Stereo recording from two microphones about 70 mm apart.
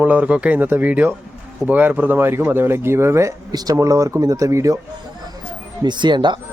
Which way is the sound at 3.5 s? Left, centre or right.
Right.